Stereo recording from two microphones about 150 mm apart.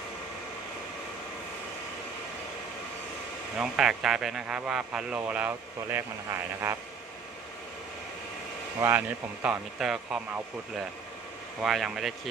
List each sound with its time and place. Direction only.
3.6 s a man's voice: 5° right (ahead or behind)
8.8 s speech: 10° right (ahead or behind)
11.6 s a man's voice: centre (ahead or behind)